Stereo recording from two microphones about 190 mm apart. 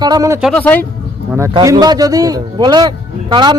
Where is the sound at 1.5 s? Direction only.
20° right (ahead or behind).